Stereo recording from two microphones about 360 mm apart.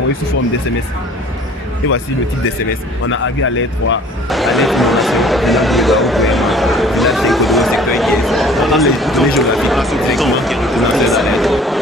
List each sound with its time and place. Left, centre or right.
3.1 s speech: left
4.3 s speech: centre